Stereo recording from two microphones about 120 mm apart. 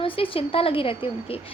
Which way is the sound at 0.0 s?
50° left (ahead or behind).